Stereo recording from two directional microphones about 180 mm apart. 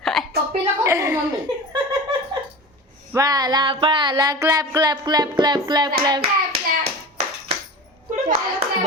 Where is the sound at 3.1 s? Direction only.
20° right (ahead or behind).